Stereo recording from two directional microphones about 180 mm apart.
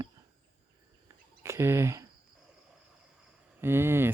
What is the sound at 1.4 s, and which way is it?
Speech, 15° right (ahead or behind).